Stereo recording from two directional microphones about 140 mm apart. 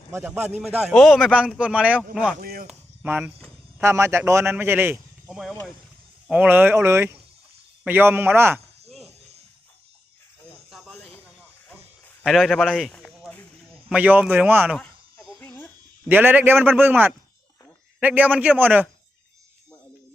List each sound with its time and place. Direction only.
0.1 s a man's voice: 15° right (ahead or behind)
2.3 s a sound: 90° right
2.6 s cricket: 10° right (ahead or behind)
3.8 s a man's voice: 20° right (ahead or behind)
5.3 s a man's voice: centre (ahead or behind)
10.7 s snake: centre (ahead or behind)
12.2 s a man's voice: centre (ahead or behind)
13.9 s a man's voice: 10° right (ahead or behind)
14.8 s a sound: centre (ahead or behind)
15.4 s a sound: 10° left (ahead or behind)
16.0 s a man's voice: 15° right (ahead or behind)